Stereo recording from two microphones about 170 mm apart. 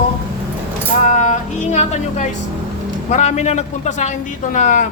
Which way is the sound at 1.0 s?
45° left (ahead or behind).